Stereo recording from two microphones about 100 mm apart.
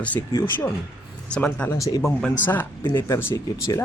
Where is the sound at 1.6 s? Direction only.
35° left (ahead or behind).